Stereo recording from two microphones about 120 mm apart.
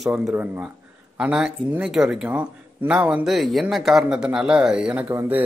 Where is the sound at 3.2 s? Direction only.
Centre (ahead or behind).